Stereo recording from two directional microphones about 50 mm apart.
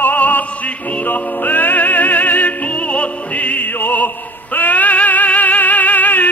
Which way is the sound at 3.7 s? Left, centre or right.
Left.